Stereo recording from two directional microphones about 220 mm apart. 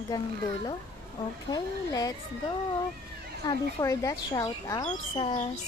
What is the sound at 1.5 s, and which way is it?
Speech, 15° left (ahead or behind).